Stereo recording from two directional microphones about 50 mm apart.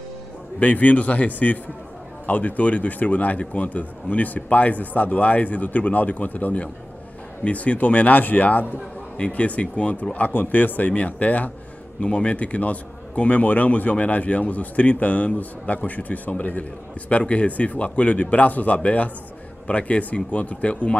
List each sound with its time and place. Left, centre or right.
0.6 s a man's voice: left